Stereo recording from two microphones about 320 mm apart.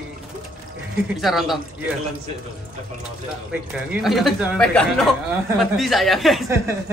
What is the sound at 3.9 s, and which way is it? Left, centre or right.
Speech, centre.